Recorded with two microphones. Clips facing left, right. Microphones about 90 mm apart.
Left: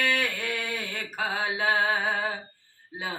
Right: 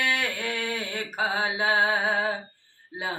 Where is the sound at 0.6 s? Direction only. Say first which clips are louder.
Right 3 dB; 25° right (ahead or behind).